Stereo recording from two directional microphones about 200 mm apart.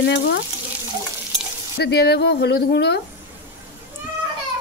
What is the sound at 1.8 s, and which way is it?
Speech, 55° left (ahead or behind).